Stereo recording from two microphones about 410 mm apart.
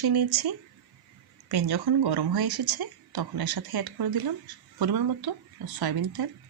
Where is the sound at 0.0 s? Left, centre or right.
Right.